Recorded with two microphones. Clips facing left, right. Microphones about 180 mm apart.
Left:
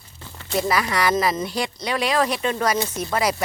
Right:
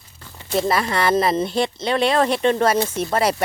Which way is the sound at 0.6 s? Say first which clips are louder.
Right 1 dB; 30° right (ahead or behind).